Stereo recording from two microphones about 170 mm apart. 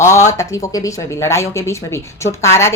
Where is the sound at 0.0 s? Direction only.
15° left (ahead or behind).